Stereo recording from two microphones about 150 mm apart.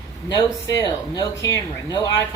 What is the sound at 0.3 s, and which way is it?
Speech, 25° left (ahead or behind).